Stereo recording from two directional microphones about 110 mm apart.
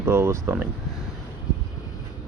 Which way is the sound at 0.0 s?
25° right (ahead or behind).